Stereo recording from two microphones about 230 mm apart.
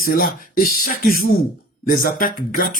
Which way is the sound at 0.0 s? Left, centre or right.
Left.